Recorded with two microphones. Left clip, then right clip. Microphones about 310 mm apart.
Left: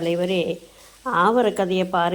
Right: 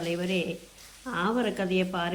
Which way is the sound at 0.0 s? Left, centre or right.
Left.